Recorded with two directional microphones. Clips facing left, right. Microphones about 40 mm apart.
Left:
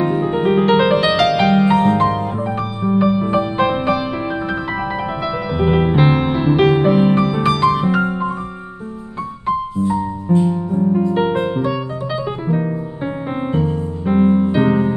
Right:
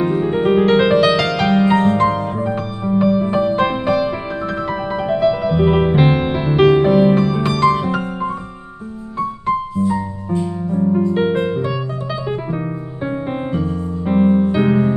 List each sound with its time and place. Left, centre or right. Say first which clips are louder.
0.0 s music: even; centre
9.8 s music: left 2 dB; left
11.1 s music: even; centre
14.1 s music: even; centre